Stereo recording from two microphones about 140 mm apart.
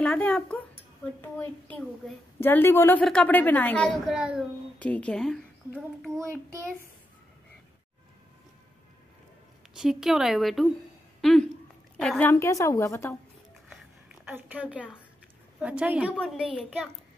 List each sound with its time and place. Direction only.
0.0 s a woman's voice: 5° left (ahead or behind)
4.1 s speech: 5° right (ahead or behind)
4.7 s a woman's voice: 10° left (ahead or behind)
9.8 s speech: 5° right (ahead or behind)
12.3 s a woman's voice: 20° left (ahead or behind)
14.2 s a woman's voice: 10° right (ahead or behind)